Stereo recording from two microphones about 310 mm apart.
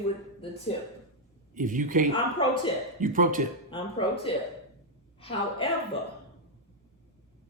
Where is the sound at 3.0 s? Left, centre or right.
Right.